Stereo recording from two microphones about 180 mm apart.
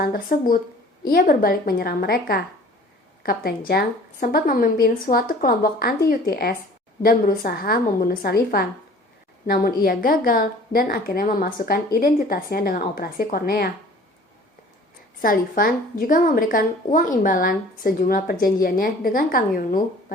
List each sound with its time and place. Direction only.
0.0 s a woman's voice: 50° left (ahead or behind)
15.2 s a woman's voice: 50° left (ahead or behind)